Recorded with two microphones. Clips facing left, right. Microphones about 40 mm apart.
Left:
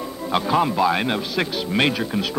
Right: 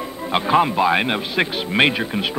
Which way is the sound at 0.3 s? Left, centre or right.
Right.